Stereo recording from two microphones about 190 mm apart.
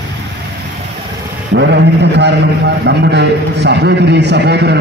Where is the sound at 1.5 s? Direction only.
65° right (ahead or behind).